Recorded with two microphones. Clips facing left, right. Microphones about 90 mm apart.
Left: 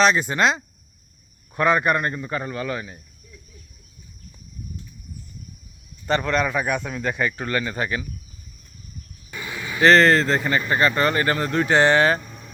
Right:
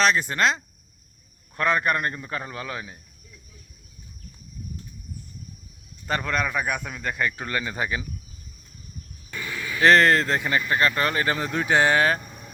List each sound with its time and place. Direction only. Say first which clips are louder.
0.0 s a man's voice: left 3 dB; centre (ahead or behind)
6.1 s a man's voice: left 4 dB; centre (ahead or behind)
9.3 s a sound: even; 20° left (ahead or behind)
9.8 s a man's voice: left 2 dB; 5° right (ahead or behind)